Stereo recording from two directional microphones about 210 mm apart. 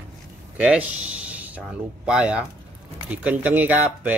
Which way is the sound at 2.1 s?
5° right (ahead or behind).